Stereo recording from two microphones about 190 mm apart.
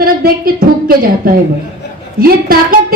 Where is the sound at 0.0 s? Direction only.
50° right (ahead or behind).